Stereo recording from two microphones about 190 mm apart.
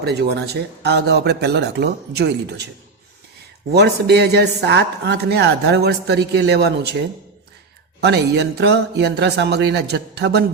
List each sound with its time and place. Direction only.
0.0 s speech: 60° right (ahead or behind)
3.7 s speech: 60° right (ahead or behind)
8.0 s speech: 60° right (ahead or behind)